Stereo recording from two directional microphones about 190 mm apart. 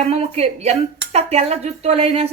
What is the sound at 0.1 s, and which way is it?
Speech, 35° right (ahead or behind).